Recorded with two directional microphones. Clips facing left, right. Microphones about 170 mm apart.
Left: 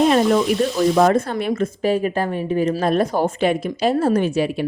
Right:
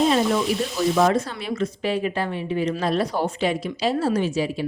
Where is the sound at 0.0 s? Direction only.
55° left (ahead or behind).